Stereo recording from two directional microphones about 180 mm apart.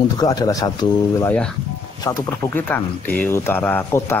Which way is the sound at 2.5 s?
10° left (ahead or behind).